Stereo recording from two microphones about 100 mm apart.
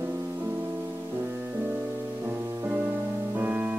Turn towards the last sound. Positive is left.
turn(degrees=-15)  # may be behind; listen again after turning